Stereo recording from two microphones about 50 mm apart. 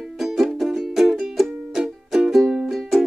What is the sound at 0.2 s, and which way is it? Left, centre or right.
Music, centre.